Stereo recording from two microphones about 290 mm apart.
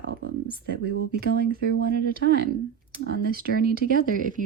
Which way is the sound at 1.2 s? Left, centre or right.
Right.